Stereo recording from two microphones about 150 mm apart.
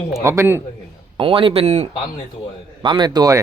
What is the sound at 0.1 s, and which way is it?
Speech, 20° right (ahead or behind).